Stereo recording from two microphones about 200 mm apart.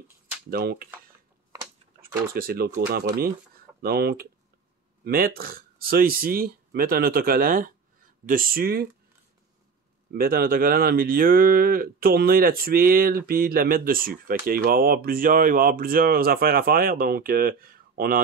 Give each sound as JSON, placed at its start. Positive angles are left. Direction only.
{"t": 0.5, "sound": "speech", "side_deg": -50}
{"t": 2.3, "sound": "speech", "side_deg": -45}
{"t": 3.8, "sound": "speech", "side_deg": -50}
{"t": 10.1, "sound": "speech", "side_deg": -45}